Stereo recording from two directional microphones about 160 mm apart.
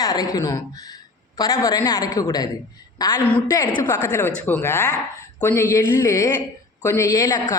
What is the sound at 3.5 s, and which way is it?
A woman's voice, 25° left (ahead or behind).